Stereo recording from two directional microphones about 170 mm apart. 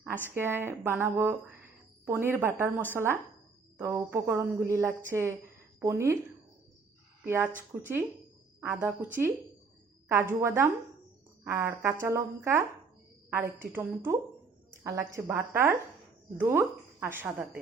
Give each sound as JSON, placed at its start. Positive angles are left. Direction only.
{"t": 0.3, "sound": "a woman's voice", "side_deg": -15}
{"t": 7.3, "sound": "a woman's voice", "side_deg": -15}
{"t": 13.7, "sound": "a woman's voice", "side_deg": -10}